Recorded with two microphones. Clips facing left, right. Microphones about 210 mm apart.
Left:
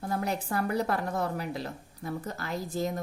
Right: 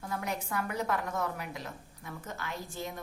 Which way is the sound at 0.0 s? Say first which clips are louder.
Left 5 dB; 35° left (ahead or behind).